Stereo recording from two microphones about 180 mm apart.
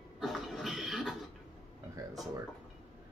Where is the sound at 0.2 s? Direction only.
Centre (ahead or behind).